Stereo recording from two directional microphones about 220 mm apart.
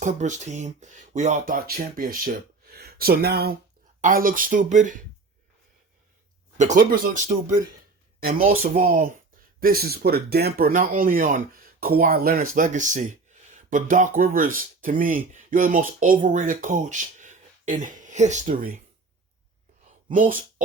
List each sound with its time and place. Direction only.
0.0 s speech: 35° right (ahead or behind)
6.6 s speech: 35° right (ahead or behind)
20.1 s speech: 40° right (ahead or behind)